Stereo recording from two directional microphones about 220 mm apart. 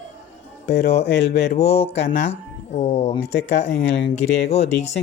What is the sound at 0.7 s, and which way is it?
Speech, 50° left (ahead or behind).